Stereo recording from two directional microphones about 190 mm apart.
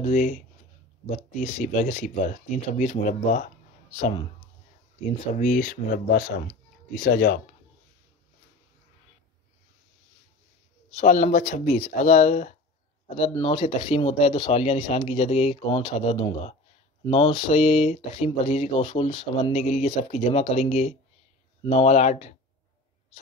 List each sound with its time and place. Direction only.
0.0 s speech: 40° left (ahead or behind)
5.0 s speech: 40° left (ahead or behind)
11.0 s speech: 35° left (ahead or behind)